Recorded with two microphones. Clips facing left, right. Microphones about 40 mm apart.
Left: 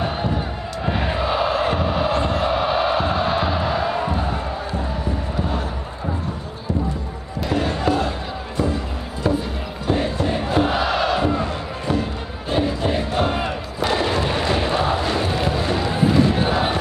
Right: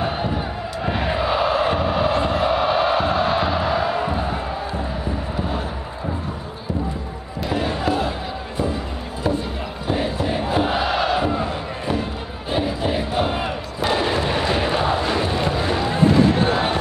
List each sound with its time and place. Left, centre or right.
0.0 s crowd: centre
7.3 s music: centre
9.8 s crowd: centre
10.8 s crowd: centre
13.8 s artillery fire: centre
16.4 s a sound: centre